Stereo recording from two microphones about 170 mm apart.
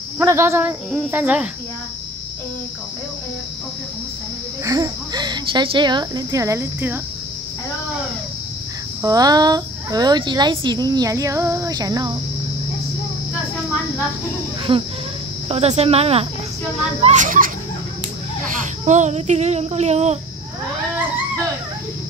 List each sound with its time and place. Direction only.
0.2 s speech: 15° right (ahead or behind)
4.6 s speech: 20° right (ahead or behind)
9.0 s speech: 20° right (ahead or behind)
14.7 s speech: 30° right (ahead or behind)
17.0 s a child's voice: 45° right (ahead or behind)